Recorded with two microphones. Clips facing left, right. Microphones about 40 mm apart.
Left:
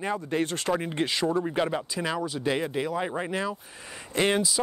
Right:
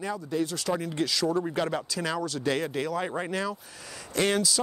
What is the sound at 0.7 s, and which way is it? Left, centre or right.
Speech, left.